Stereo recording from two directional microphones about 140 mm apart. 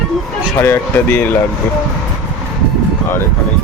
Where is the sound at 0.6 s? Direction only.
15° left (ahead or behind).